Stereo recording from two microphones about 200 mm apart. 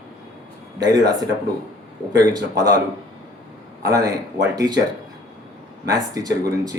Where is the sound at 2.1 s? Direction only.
20° right (ahead or behind).